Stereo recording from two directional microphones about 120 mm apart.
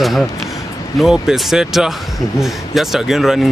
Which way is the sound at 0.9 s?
Centre (ahead or behind).